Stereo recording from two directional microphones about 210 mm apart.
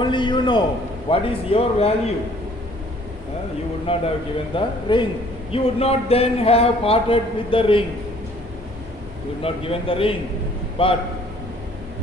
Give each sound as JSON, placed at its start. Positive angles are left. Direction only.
{"t": 0.0, "sound": "a man's voice", "side_deg": 20}
{"t": 3.8, "sound": "a man's voice", "side_deg": 25}
{"t": 9.4, "sound": "a man's voice", "side_deg": 25}